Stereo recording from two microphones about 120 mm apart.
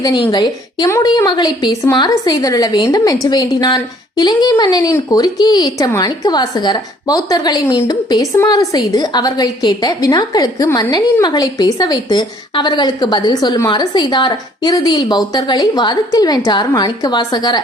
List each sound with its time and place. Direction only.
0.0 s a woman's voice: 40° left (ahead or behind)
4.9 s a woman's voice: 25° left (ahead or behind)